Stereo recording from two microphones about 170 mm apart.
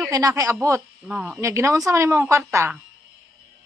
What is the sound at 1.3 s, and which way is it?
A woman's voice, 15° right (ahead or behind).